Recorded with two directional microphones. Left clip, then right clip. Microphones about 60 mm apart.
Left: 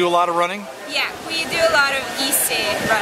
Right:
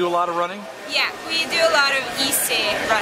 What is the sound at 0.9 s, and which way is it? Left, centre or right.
Speech, centre.